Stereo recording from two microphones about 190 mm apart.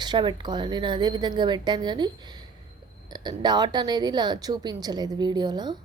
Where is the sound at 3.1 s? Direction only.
20° right (ahead or behind).